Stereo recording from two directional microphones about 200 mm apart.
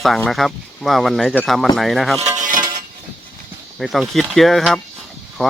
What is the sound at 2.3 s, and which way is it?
Music, 40° right (ahead or behind).